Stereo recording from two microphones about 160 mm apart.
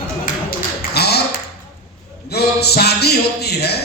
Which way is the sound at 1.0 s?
90° left.